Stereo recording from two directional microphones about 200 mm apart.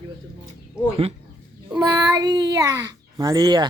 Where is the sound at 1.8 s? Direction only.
20° right (ahead or behind).